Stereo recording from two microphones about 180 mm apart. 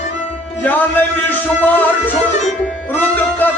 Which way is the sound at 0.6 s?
10° left (ahead or behind).